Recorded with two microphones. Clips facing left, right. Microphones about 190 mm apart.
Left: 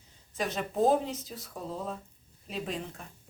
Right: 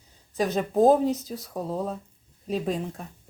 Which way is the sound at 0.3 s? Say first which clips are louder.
Right 7 dB; 40° right (ahead or behind).